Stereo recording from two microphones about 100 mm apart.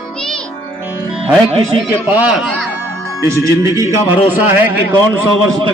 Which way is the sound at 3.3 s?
30° right (ahead or behind).